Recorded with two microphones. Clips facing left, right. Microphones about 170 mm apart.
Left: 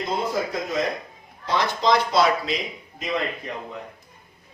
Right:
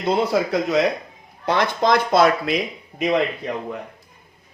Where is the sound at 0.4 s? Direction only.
75° right (ahead or behind).